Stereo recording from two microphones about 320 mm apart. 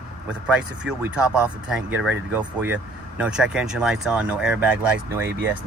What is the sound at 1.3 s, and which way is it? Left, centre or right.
Speech, centre.